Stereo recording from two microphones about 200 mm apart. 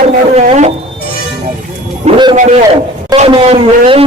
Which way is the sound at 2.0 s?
25° right (ahead or behind).